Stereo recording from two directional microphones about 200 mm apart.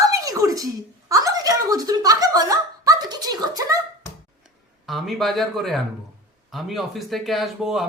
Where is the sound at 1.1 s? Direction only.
15° right (ahead or behind).